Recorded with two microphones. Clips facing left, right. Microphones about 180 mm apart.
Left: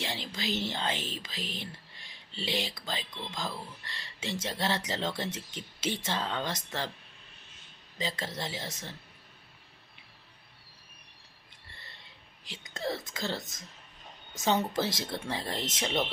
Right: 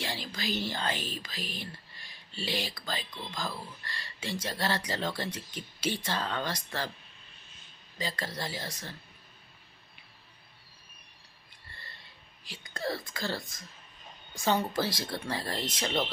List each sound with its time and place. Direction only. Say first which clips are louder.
0.0 s speech: even; 20° left (ahead or behind)
7.9 s speech: left 1 dB; 20° left (ahead or behind)
12.5 s speech: even; 20° left (ahead or behind)